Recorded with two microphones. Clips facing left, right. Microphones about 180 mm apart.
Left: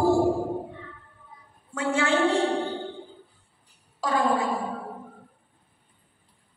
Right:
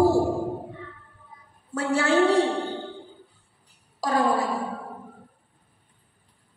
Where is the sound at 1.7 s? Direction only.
35° right (ahead or behind).